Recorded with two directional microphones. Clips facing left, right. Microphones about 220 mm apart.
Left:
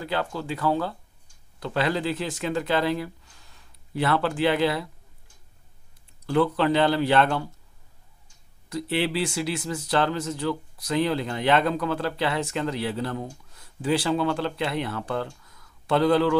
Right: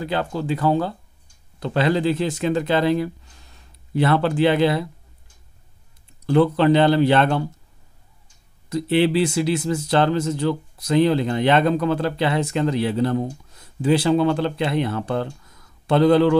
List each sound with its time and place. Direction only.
0.0 s speech: 20° right (ahead or behind)
6.2 s speech: 25° right (ahead or behind)
8.6 s speech: 20° right (ahead or behind)